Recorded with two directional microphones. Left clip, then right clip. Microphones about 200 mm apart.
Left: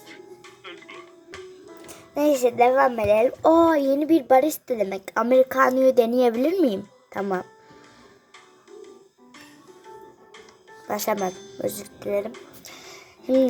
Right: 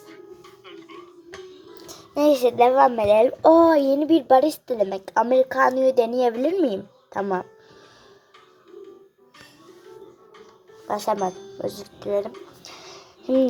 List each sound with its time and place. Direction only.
0.1 s music: 40° left (ahead or behind)
2.2 s a child's voice: 5° right (ahead or behind)
10.8 s speech: 35° left (ahead or behind)
11.8 s a child's voice: 20° left (ahead or behind)
12.3 s a sound: 30° left (ahead or behind)
13.0 s a sound: 5° left (ahead or behind)